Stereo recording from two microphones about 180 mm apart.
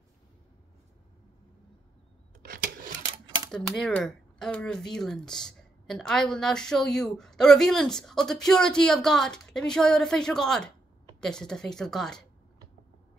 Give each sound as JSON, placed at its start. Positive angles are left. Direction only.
{"t": 2.4, "sound": "a sound", "side_deg": -50}
{"t": 3.1, "sound": "typewriter", "side_deg": -25}
{"t": 3.5, "sound": "speech", "side_deg": 5}